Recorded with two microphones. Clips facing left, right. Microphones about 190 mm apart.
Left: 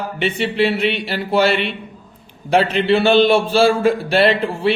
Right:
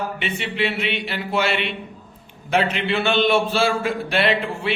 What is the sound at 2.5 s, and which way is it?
A man's voice, 35° left (ahead or behind).